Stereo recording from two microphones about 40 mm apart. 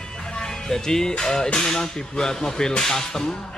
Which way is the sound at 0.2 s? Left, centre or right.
Left.